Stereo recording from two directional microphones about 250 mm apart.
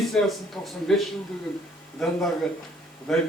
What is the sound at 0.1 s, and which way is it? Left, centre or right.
A man's voice, centre.